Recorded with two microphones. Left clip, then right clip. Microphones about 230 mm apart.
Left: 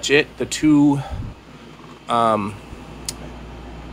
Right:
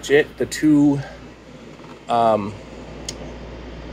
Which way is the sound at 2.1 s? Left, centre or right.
Left.